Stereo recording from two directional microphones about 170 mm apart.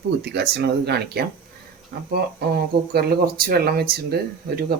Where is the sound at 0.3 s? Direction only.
75° right (ahead or behind).